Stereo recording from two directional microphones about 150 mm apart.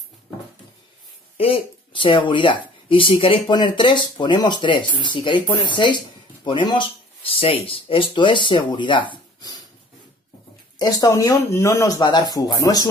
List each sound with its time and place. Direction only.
1.4 s speech: 35° left (ahead or behind)
10.8 s speech: 25° left (ahead or behind)